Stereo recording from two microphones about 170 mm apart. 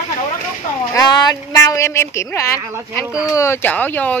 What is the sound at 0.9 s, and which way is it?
A woman's voice, 20° left (ahead or behind).